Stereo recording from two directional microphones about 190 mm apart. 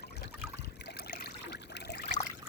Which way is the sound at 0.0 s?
60° left (ahead or behind).